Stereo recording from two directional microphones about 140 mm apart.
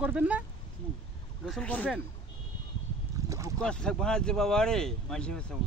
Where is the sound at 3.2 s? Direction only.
20° right (ahead or behind).